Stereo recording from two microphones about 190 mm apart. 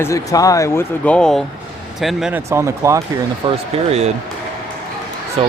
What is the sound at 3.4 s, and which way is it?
Speech, 35° right (ahead or behind).